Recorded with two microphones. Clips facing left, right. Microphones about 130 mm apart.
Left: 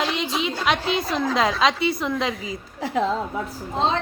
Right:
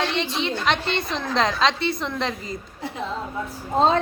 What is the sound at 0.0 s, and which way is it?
A woman's voice, centre (ahead or behind).